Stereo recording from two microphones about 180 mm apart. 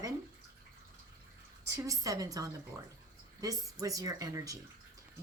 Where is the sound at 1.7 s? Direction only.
20° right (ahead or behind).